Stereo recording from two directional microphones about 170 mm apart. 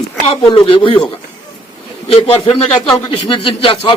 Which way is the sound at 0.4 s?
30° left (ahead or behind).